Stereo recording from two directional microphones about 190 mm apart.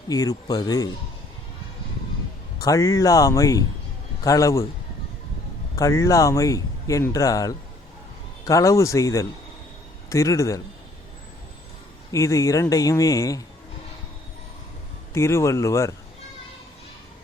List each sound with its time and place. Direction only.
0.1 s speech: 20° left (ahead or behind)
2.6 s speech: 15° left (ahead or behind)
5.7 s speech: 15° left (ahead or behind)
12.1 s speech: 15° left (ahead or behind)
15.1 s speech: 15° left (ahead or behind)